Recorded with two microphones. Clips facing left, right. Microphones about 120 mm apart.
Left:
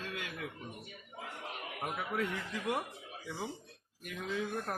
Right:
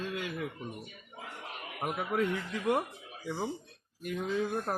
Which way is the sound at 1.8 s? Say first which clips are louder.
Right 5 dB; 55° right (ahead or behind).